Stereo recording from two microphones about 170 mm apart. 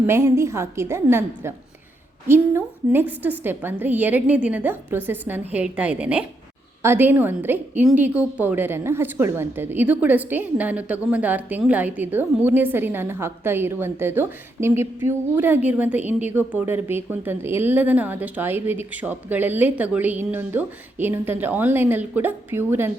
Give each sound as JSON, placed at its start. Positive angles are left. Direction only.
{"t": 0.0, "sound": "a woman's voice", "side_deg": -15}